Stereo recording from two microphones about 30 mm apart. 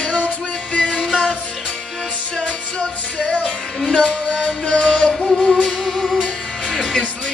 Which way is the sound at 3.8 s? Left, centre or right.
Left.